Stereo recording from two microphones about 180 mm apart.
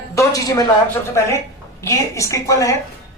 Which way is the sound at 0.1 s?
20° left (ahead or behind).